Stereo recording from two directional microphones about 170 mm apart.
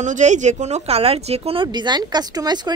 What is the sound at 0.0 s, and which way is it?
Speech, 45° right (ahead or behind).